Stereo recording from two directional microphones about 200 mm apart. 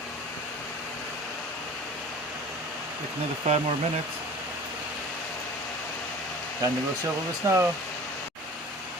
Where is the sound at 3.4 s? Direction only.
35° right (ahead or behind).